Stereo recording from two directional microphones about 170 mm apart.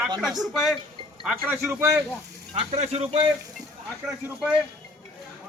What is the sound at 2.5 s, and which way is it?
Speech, 40° right (ahead or behind).